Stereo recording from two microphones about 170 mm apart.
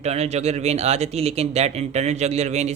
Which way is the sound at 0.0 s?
40° right (ahead or behind).